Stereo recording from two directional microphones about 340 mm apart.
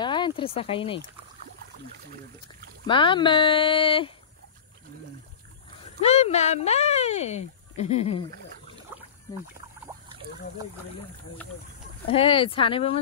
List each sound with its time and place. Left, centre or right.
0.0 s speech: centre
2.4 s speech: centre
5.9 s speech: centre
12.1 s speech: centre